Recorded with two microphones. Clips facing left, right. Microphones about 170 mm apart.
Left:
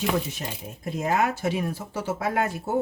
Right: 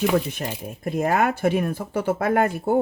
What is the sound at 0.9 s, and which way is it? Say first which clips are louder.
Speech: right 3 dB; 55° right (ahead or behind).